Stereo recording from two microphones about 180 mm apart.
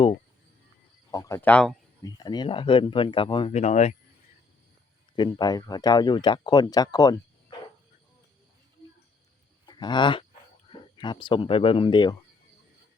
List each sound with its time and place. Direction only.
1.1 s speech: 15° left (ahead or behind)
2.0 s speech: 20° left (ahead or behind); by 3.9 s 40° left (ahead or behind)
5.1 s speech: 25° left (ahead or behind)
9.6 s speech: 25° left (ahead or behind)